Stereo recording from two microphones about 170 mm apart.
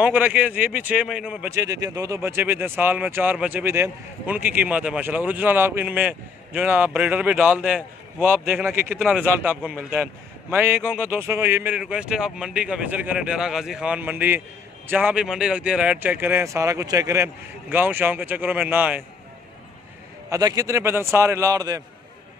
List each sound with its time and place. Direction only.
0.0 s speech: 10° right (ahead or behind)
1.5 s speech: 20° right (ahead or behind)
20.2 s a man's voice: 20° right (ahead or behind)